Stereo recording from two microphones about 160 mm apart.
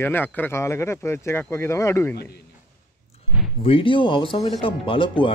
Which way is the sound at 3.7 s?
35° left (ahead or behind).